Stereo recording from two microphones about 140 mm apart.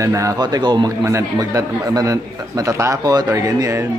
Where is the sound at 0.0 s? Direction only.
25° right (ahead or behind).